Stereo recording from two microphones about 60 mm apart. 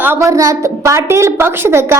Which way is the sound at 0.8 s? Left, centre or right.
Right.